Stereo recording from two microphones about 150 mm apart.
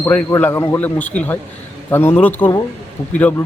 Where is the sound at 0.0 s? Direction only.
15° left (ahead or behind).